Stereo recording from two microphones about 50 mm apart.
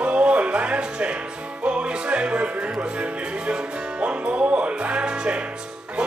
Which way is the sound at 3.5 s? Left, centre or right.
Right.